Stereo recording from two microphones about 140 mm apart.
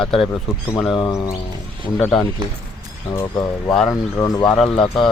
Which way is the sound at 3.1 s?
20° left (ahead or behind).